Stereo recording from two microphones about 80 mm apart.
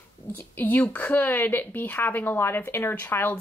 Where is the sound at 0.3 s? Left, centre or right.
Left.